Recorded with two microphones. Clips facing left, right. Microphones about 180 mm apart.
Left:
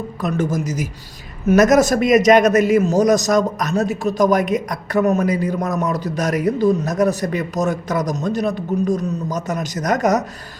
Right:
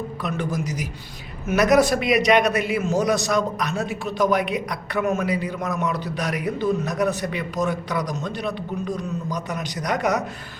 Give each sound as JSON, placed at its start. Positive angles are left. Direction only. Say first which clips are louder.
{"t": 0.2, "sound": "a man's voice", "louder": "left 7 dB", "side_deg": 45}